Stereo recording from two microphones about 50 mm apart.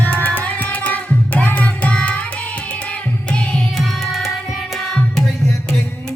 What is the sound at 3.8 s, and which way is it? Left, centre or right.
Music, centre.